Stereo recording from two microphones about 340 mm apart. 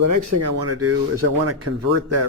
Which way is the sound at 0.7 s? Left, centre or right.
Right.